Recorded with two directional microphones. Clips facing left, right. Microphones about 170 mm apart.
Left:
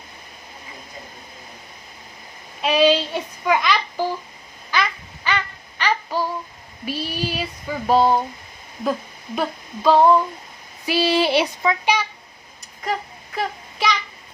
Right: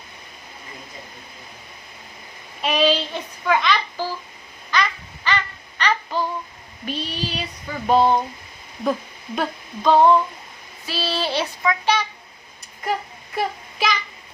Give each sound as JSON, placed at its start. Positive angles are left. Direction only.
{"t": 2.6, "sound": "a sound", "side_deg": 0}
{"t": 2.8, "sound": "child singing", "side_deg": 10}
{"t": 4.7, "sound": "babbling", "side_deg": 10}
{"t": 6.8, "sound": "a sound", "side_deg": 10}
{"t": 7.9, "sound": "speech", "side_deg": 0}
{"t": 8.8, "sound": "a sound", "side_deg": 0}
{"t": 10.8, "sound": "speech", "side_deg": 15}
{"t": 11.6, "sound": "a child's voice", "side_deg": 30}
{"t": 12.8, "sound": "child singing", "side_deg": -5}